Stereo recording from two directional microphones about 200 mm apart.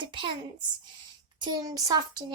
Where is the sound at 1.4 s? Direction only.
20° right (ahead or behind).